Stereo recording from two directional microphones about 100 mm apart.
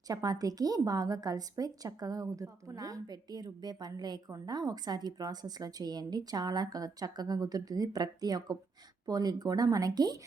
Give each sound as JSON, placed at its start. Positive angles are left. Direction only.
{"t": 0.1, "sound": "a woman's voice", "side_deg": -40}